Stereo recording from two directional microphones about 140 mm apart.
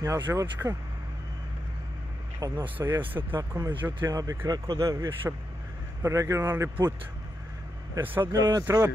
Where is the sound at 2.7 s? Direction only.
15° right (ahead or behind).